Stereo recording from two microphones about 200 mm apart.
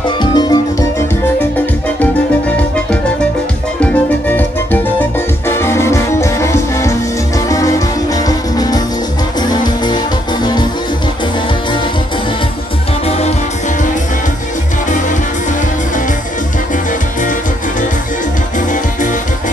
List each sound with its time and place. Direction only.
0.2 s music: 20° left (ahead or behind)
3.8 s music: 10° left (ahead or behind)
5.5 s music: 10° left (ahead or behind)